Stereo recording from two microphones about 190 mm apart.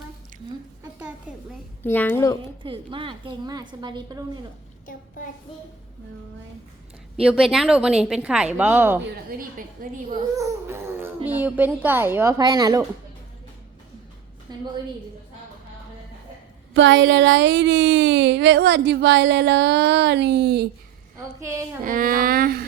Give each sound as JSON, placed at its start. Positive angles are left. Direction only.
{"t": 0.9, "sound": "a sound", "side_deg": -5}
{"t": 1.8, "sound": "a child's voice", "side_deg": 10}
{"t": 2.6, "sound": "a woman's voice", "side_deg": -25}
{"t": 4.9, "sound": "child singing", "side_deg": 45}
{"t": 7.2, "sound": "a woman's voice", "side_deg": -5}
{"t": 9.4, "sound": "speech", "side_deg": -45}
{"t": 10.3, "sound": "speech", "side_deg": -15}
{"t": 14.5, "sound": "a woman's voice", "side_deg": -20}
{"t": 16.7, "sound": "a woman's voice", "side_deg": -75}
{"t": 21.4, "sound": "speech", "side_deg": -15}
{"t": 21.8, "sound": "speech", "side_deg": -45}